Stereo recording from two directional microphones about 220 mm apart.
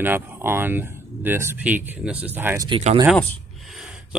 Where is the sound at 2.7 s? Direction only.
25° right (ahead or behind).